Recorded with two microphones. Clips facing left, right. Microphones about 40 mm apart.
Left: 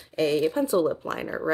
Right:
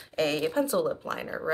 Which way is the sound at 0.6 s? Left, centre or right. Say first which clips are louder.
Left 3 dB; left.